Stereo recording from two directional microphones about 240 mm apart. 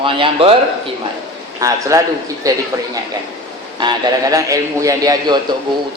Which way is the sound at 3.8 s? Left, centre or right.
Centre.